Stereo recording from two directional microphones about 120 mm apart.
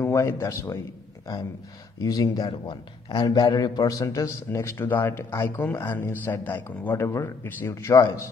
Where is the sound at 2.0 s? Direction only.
30° left (ahead or behind).